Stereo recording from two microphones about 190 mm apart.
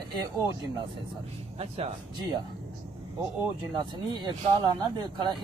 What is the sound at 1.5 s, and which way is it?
Speech, 30° right (ahead or behind).